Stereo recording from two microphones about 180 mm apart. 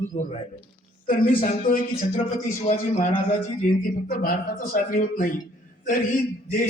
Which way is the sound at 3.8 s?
50° left (ahead or behind).